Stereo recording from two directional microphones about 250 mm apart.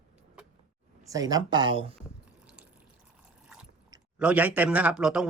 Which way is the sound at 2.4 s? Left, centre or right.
Centre.